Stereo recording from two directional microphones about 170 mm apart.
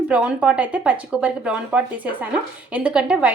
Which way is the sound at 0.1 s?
5° right (ahead or behind).